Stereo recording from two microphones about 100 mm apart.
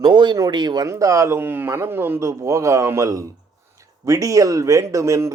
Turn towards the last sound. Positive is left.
turn(degrees=-30)  # may be behind; listen again after turning